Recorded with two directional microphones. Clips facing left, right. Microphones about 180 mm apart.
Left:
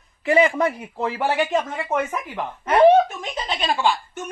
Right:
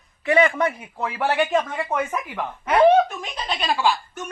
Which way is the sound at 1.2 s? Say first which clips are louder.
Right 1 dB; centre (ahead or behind).